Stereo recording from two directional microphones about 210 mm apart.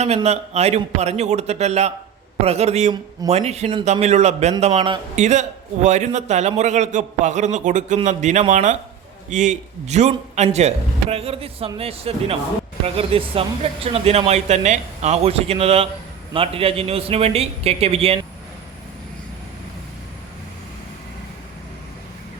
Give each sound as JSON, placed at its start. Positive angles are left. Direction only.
{"t": 0.0, "sound": "a man's voice", "side_deg": -30}